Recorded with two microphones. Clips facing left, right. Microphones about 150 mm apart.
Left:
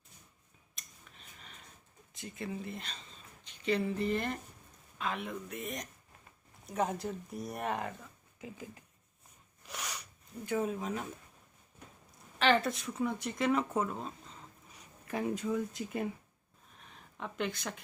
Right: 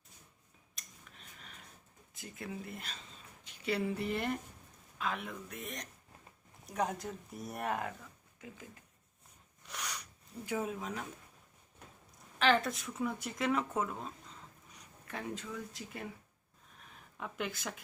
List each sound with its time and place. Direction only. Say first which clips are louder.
0.8 s a sound: even; centre (ahead or behind)
2.1 s speech: left 3 dB; centre (ahead or behind)
4.9 s speech: left 2 dB; centre (ahead or behind)
9.6 s a sound: left 1 dB; 5° left (ahead or behind)
10.4 s speech: left 3 dB; 10° right (ahead or behind)
10.8 s speech: left 4 dB; 5° left (ahead or behind)
12.4 s speech: left 1 dB; centre (ahead or behind); by 16.0 s 20° left (ahead or behind)
17.2 s speech: left 3 dB; 5° right (ahead or behind)